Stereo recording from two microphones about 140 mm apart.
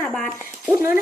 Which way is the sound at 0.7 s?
15° right (ahead or behind).